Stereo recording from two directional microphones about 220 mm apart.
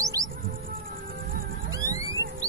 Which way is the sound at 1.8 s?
15° right (ahead or behind).